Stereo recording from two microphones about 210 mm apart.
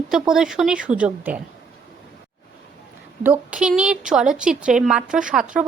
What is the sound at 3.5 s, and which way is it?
Speech, 5° right (ahead or behind).